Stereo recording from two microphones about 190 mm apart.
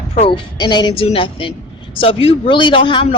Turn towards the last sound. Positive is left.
turn(degrees=25)  # may be behind; listen again after turning